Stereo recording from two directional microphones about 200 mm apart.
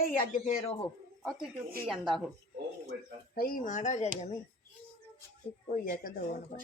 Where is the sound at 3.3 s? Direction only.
45° left (ahead or behind).